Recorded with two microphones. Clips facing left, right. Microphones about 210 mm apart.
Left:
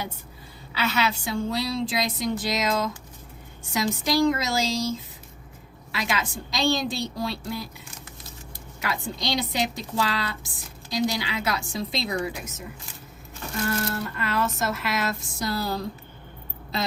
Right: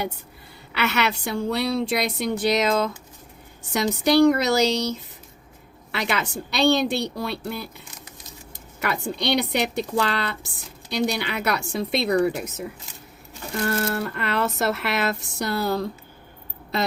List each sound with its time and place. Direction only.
0.7 s a woman's voice: 70° right (ahead or behind)
8.8 s speech: 65° right (ahead or behind)
13.9 s speech: 60° right (ahead or behind)